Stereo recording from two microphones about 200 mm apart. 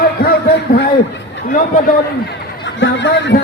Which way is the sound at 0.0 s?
50° left (ahead or behind).